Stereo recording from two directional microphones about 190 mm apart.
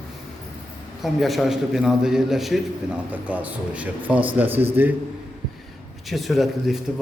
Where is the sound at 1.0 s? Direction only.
Centre (ahead or behind).